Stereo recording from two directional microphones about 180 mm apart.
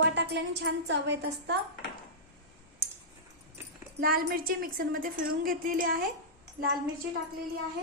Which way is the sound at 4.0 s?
55° right (ahead or behind).